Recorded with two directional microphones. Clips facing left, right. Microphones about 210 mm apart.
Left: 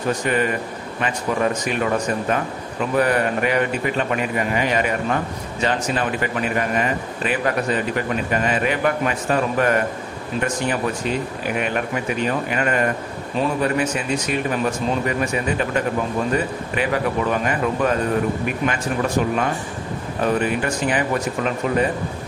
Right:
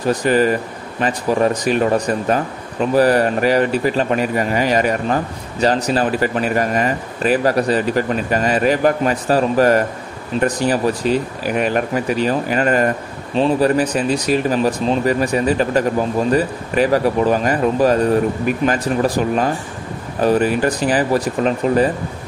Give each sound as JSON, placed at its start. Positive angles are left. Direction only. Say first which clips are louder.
{"t": 0.1, "sound": "a man's voice", "louder": "right 6 dB", "side_deg": -35}